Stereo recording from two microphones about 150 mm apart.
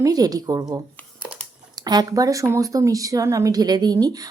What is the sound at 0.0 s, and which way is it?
Speech, 25° right (ahead or behind).